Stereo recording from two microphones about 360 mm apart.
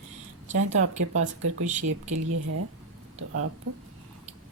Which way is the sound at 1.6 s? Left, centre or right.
Centre.